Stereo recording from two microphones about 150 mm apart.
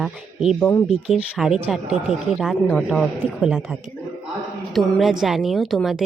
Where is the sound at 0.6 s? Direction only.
15° left (ahead or behind).